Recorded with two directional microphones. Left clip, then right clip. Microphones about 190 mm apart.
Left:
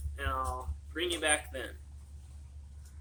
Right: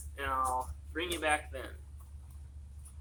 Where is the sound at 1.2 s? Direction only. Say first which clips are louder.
Right 1 dB; 10° left (ahead or behind).